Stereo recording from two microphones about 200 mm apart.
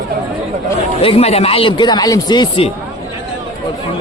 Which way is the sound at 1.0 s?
30° left (ahead or behind).